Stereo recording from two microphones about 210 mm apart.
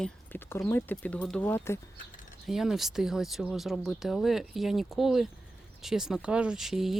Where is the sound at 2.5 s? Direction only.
Centre (ahead or behind).